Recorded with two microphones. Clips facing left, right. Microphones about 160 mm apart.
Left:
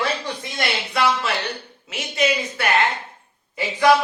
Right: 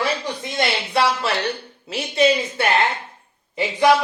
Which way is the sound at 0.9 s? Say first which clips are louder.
Right 1 dB; 30° right (ahead or behind).